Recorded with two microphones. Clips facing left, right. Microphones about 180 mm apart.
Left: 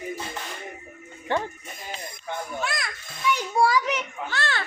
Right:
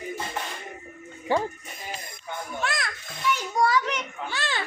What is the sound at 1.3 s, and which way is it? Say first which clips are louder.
Speech: right 2 dB; 10° right (ahead or behind).